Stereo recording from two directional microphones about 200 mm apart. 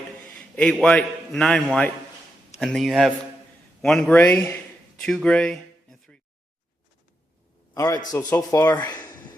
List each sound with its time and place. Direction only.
0.3 s a man's voice: 5° left (ahead or behind)
5.0 s a sound: 5° left (ahead or behind)
7.7 s a man's voice: 20° left (ahead or behind)